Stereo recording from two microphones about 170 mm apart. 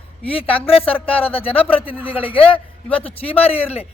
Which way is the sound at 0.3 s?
35° left (ahead or behind).